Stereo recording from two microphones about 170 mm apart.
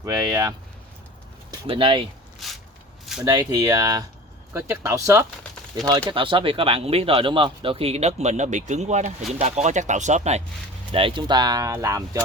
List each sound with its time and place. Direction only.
0.0 s speech: 20° right (ahead or behind)
2.4 s a sound: centre (ahead or behind)
3.2 s speech: 20° right (ahead or behind); by 10.4 s 40° right (ahead or behind)
10.9 s speech: 30° right (ahead or behind)